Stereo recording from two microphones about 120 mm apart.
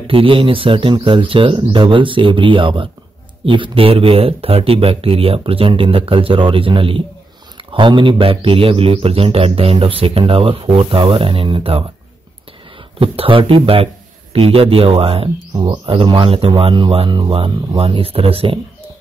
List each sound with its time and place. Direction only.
0.0 s a man's voice: 45° right (ahead or behind)
13.0 s a man's voice: 50° right (ahead or behind)
15.5 s speech: 35° right (ahead or behind)
15.9 s a man's voice: 50° right (ahead or behind)